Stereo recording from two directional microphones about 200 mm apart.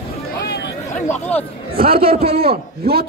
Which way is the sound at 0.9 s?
35° left (ahead or behind).